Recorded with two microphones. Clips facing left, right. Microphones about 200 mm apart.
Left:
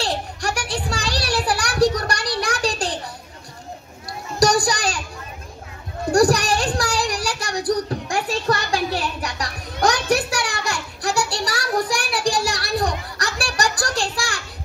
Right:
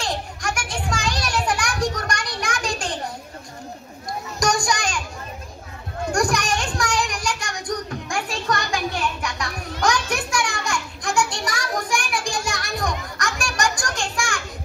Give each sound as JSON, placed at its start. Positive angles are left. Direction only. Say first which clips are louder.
{"t": 0.0, "sound": "children playing", "louder": "left 3 dB", "side_deg": 35}
{"t": 4.0, "sound": "children playing", "louder": "left 5 dB", "side_deg": 35}
{"t": 6.1, "sound": "child singing", "louder": "left 6 dB", "side_deg": 35}